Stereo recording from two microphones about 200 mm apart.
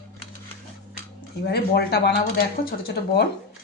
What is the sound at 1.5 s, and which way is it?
Speech, 50° left (ahead or behind).